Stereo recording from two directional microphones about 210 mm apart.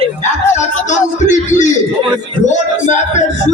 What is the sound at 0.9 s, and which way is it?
Speech, 35° left (ahead or behind).